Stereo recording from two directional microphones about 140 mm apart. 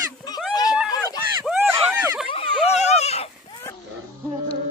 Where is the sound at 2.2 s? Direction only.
40° left (ahead or behind).